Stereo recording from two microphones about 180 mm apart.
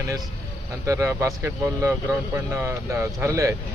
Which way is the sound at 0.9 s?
15° right (ahead or behind).